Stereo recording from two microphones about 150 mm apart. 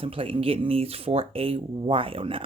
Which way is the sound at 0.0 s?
35° right (ahead or behind).